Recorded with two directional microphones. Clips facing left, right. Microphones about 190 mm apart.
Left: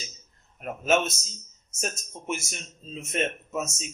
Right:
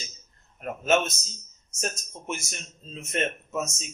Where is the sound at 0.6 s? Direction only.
5° left (ahead or behind).